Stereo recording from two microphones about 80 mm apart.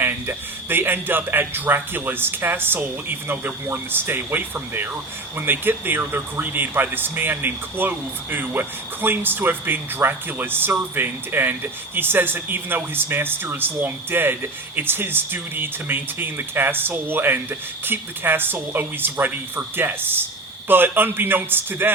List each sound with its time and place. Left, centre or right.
0.0 s speech: right